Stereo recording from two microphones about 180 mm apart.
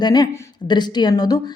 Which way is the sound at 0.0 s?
20° left (ahead or behind).